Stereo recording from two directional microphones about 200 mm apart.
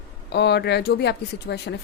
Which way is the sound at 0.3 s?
55° left (ahead or behind).